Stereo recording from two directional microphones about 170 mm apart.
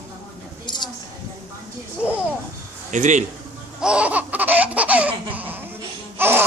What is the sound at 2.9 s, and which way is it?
Speech, 45° right (ahead or behind).